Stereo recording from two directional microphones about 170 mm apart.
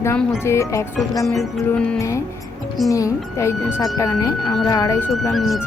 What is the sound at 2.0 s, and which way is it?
A woman's voice, 20° left (ahead or behind).